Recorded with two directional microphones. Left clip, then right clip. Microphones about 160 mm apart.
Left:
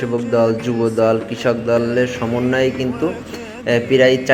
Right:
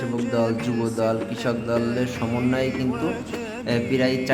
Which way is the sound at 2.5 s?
15° left (ahead or behind).